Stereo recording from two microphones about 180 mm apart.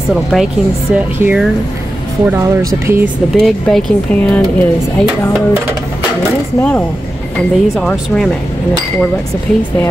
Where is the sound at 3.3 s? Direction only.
5° left (ahead or behind).